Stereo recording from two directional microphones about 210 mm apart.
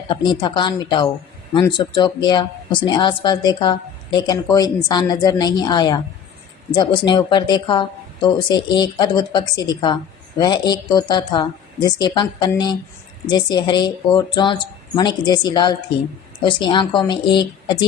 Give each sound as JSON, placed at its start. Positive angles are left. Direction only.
{"t": 0.3, "sound": "speech", "side_deg": 20}